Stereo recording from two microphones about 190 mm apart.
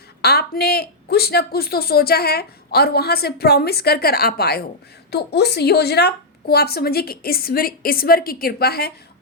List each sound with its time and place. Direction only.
0.2 s a woman's voice: 55° left (ahead or behind)